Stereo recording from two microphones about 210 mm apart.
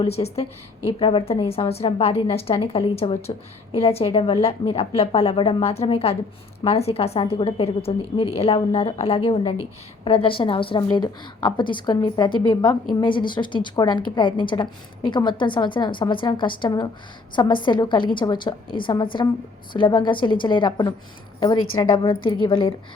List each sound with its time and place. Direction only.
0.0 s a woman's voice: 30° left (ahead or behind)